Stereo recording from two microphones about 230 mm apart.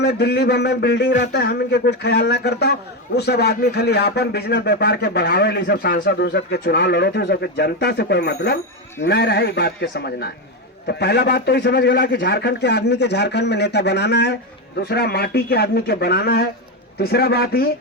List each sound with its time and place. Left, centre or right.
0.0 s speech: left
1.1 s speech: left